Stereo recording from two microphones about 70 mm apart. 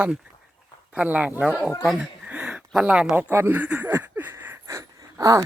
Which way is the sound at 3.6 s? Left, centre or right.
Right.